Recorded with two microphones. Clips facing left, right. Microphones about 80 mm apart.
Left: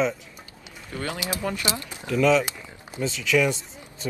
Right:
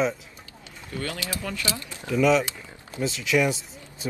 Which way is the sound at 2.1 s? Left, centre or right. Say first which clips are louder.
Left 1 dB; centre.